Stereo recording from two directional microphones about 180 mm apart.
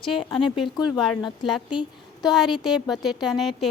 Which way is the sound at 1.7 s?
25° left (ahead or behind).